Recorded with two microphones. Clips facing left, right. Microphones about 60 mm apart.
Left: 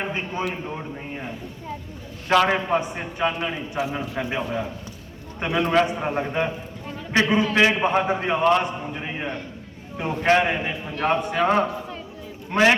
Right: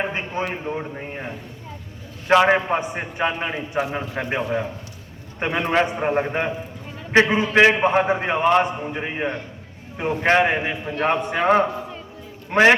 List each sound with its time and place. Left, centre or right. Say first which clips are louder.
0.0 s a man's voice: right 2 dB; right